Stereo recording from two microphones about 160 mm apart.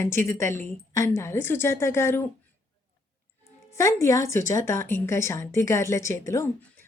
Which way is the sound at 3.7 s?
20° left (ahead or behind).